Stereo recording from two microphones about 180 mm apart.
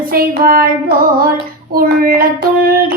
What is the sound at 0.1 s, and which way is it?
Speech, 55° right (ahead or behind).